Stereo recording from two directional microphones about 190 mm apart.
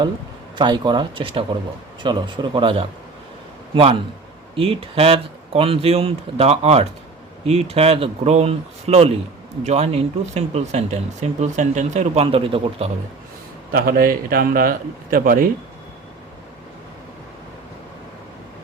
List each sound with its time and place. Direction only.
0.5 s speech: 25° right (ahead or behind)
13.7 s a man's voice: 55° right (ahead or behind)